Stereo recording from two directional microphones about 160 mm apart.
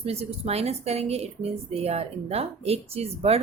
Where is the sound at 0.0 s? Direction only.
40° right (ahead or behind).